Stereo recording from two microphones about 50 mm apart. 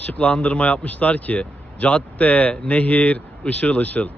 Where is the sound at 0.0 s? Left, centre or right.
Left.